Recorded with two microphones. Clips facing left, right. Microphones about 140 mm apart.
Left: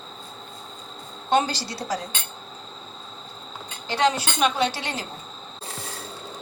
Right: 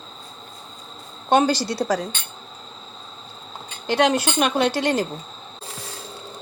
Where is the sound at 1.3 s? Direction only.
55° right (ahead or behind).